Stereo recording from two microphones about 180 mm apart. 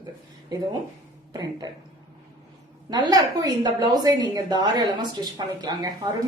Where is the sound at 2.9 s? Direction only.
20° right (ahead or behind).